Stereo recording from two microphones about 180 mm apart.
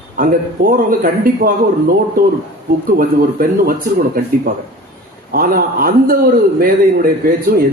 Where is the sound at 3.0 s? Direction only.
50° right (ahead or behind).